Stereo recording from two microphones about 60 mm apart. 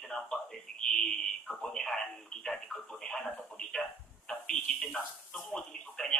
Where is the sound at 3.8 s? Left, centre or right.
Centre.